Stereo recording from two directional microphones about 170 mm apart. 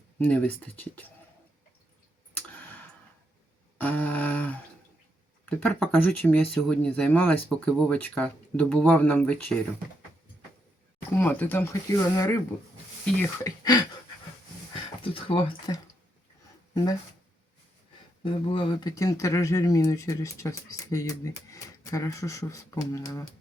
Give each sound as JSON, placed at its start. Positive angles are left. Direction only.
{"t": 0.2, "sound": "speech", "side_deg": 10}
{"t": 2.3, "sound": "clicking", "side_deg": 10}
{"t": 3.8, "sound": "humming", "side_deg": 10}
{"t": 5.5, "sound": "speech", "side_deg": 5}
{"t": 11.2, "sound": "speech", "side_deg": 10}
{"t": 13.4, "sound": "speech", "side_deg": 20}
{"t": 15.0, "sound": "speech", "side_deg": 30}
{"t": 18.2, "sound": "speech", "side_deg": 30}